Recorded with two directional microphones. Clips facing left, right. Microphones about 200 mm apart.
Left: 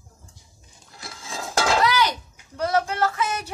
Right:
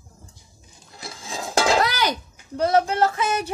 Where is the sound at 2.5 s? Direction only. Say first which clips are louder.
Right 4 dB; 25° right (ahead or behind).